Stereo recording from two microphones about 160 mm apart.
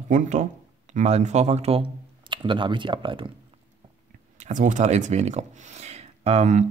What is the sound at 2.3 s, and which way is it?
Speech, 30° right (ahead or behind).